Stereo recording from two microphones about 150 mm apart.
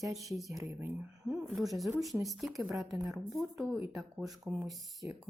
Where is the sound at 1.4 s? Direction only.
Centre (ahead or behind).